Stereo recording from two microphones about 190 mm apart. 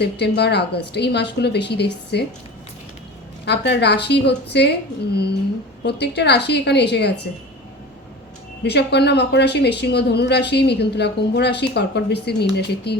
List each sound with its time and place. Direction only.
0.0 s a woman's voice: 60° left (ahead or behind)
3.4 s a woman's voice: 60° left (ahead or behind)
5.8 s a woman's voice: 60° left (ahead or behind)
8.6 s a woman's voice: 60° left (ahead or behind)